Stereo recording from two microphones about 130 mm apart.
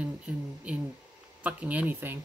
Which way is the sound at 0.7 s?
10° right (ahead or behind).